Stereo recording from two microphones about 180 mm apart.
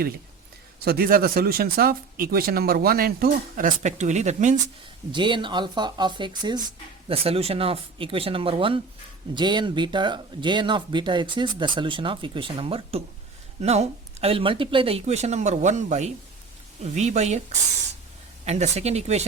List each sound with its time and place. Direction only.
0.9 s speech: 55° right (ahead or behind); by 4.5 s 40° right (ahead or behind)
5.1 s speech: 25° right (ahead or behind)
18.4 s speech: 40° right (ahead or behind)